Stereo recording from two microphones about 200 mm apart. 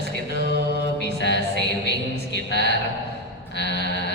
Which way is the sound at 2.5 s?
60° left (ahead or behind).